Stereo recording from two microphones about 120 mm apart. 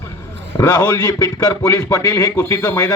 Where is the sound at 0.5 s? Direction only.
30° left (ahead or behind).